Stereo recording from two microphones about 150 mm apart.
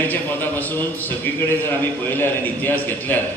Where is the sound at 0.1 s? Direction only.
10° left (ahead or behind).